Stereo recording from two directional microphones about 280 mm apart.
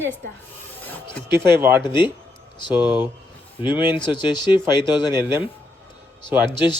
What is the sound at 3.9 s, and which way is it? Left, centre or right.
Speech, centre.